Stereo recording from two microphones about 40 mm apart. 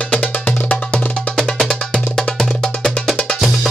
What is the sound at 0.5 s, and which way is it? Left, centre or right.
Music, left.